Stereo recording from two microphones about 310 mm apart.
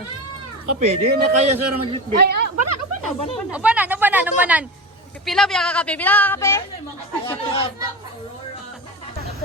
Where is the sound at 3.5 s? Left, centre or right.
Centre.